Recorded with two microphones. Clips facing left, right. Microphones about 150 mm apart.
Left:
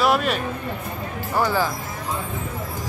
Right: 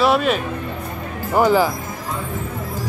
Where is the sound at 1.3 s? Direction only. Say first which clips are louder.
Right 6 dB; 15° right (ahead or behind).